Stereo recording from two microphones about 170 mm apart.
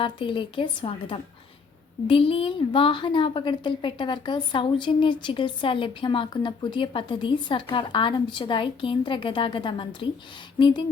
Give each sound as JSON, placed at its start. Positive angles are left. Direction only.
{"t": 0.0, "sound": "a woman's voice", "side_deg": 30}